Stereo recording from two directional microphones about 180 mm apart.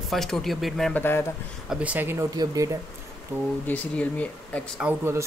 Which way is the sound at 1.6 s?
5° right (ahead or behind).